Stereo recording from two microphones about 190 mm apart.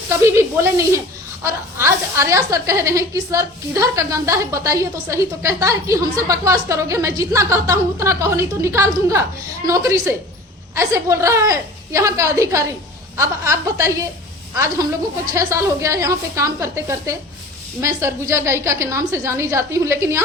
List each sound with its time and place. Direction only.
0.1 s a woman's voice: 15° right (ahead or behind)